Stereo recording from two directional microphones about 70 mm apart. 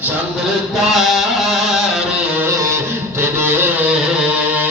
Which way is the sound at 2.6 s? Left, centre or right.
Right.